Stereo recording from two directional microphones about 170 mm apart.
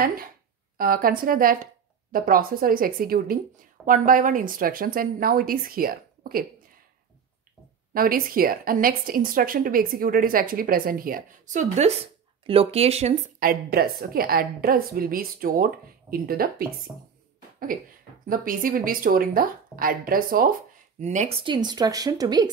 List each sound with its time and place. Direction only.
0.0 s a woman's voice: 60° right (ahead or behind)
7.9 s a woman's voice: 60° right (ahead or behind); by 13.2 s 40° right (ahead or behind)
13.4 s a woman's voice: 60° right (ahead or behind)
18.3 s a woman's voice: 55° right (ahead or behind)
21.0 s speech: 45° right (ahead or behind); by 22.5 s 20° right (ahead or behind)